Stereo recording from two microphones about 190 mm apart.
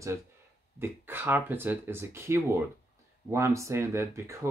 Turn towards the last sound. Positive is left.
turn(degrees=-15)  # may be behind; listen again after turning